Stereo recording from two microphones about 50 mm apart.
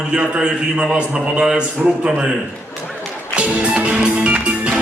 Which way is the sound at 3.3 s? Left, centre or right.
Right.